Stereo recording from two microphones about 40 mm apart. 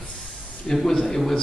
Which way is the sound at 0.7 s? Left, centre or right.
Centre.